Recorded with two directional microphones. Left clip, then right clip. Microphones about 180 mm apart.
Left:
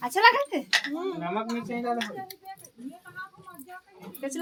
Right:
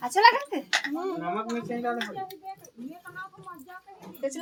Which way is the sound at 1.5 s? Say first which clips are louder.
Even; 35° left (ahead or behind).